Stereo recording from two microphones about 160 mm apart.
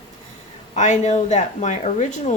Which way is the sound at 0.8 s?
45° left (ahead or behind).